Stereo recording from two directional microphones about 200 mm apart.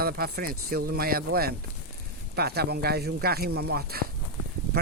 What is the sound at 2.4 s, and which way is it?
Speech, 50° right (ahead or behind).